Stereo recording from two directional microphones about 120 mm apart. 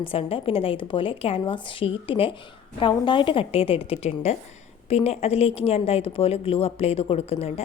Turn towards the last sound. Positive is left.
turn(degrees=55)  # may be behind; listen again after turning